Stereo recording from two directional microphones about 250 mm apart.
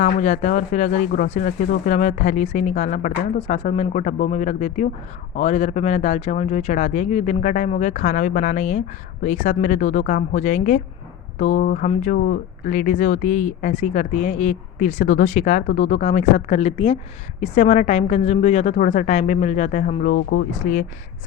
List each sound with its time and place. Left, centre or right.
0.0 s speech: left